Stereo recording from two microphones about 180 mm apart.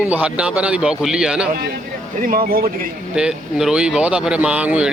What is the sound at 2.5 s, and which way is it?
Speech, 55° right (ahead or behind).